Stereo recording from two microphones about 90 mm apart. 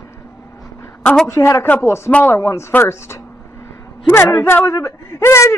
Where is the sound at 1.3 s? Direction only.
30° left (ahead or behind).